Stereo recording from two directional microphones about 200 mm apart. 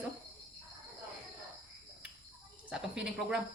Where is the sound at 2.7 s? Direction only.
5° right (ahead or behind).